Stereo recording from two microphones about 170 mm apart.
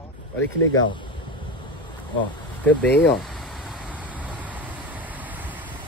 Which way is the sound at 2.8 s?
80° left.